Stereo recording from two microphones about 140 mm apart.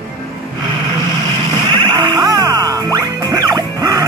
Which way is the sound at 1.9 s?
30° right (ahead or behind).